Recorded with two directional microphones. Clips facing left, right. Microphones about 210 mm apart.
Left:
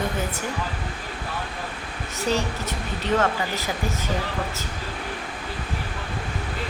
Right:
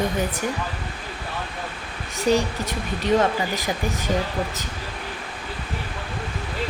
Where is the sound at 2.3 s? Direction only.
15° right (ahead or behind).